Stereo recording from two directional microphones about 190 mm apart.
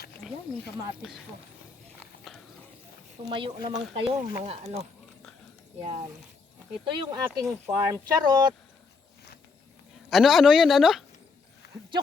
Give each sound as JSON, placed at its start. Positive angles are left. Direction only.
{"t": 1.0, "sound": "speech", "side_deg": -5}
{"t": 2.3, "sound": "horse", "side_deg": 0}
{"t": 3.2, "sound": "speech", "side_deg": -25}
{"t": 6.8, "sound": "speech", "side_deg": -25}
{"t": 7.3, "sound": "speech", "side_deg": -10}
{"t": 8.0, "sound": "speech", "side_deg": -20}
{"t": 10.1, "sound": "speech", "side_deg": 0}
{"t": 11.6, "sound": "a sound", "side_deg": 60}